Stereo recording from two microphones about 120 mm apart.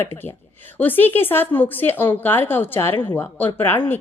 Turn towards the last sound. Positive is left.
turn(degrees=20)  # may be behind; listen again after turning